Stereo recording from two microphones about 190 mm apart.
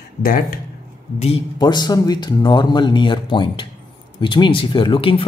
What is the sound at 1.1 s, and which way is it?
Speech, 30° left (ahead or behind).